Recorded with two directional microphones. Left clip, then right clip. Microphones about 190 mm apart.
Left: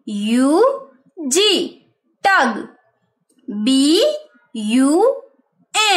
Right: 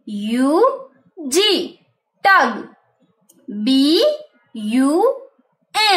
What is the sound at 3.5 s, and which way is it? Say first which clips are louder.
A woman's voice: even; 15° left (ahead or behind).